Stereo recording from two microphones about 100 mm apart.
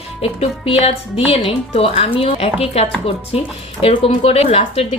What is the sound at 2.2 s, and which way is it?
A woman's voice, 75° left (ahead or behind).